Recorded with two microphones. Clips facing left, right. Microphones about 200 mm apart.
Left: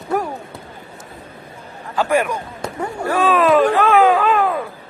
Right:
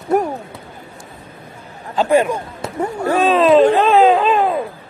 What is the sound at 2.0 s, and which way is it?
Speech, 25° right (ahead or behind).